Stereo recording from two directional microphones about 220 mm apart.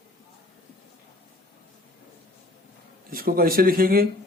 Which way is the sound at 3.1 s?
40° right (ahead or behind).